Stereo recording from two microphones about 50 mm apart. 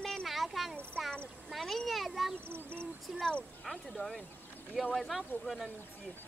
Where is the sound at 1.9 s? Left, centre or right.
Centre.